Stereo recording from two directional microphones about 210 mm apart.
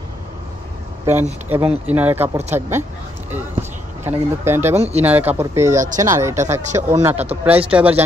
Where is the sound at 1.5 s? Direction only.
10° right (ahead or behind).